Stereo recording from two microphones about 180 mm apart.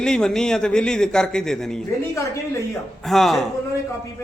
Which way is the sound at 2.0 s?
15° left (ahead or behind).